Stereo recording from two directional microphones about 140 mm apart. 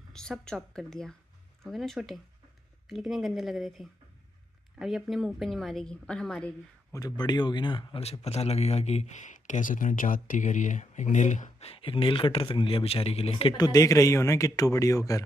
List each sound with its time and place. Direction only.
0.1 s a woman's voice: 5° left (ahead or behind)
6.9 s speech: 25° left (ahead or behind); by 11.7 s 60° left (ahead or behind)
11.7 s speech: 40° left (ahead or behind)
13.6 s speech: 25° left (ahead or behind)